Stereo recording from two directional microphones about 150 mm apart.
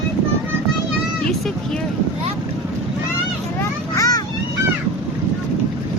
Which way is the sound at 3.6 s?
20° left (ahead or behind).